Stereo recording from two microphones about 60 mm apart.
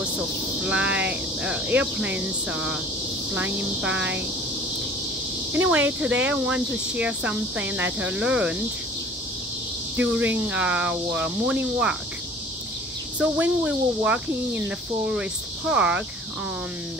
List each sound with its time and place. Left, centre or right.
0.6 s speech: centre
5.5 s speech: right
9.9 s speech: right
13.2 s speech: right